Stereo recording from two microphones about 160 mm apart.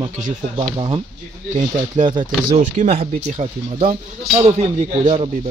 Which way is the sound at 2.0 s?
50° right (ahead or behind).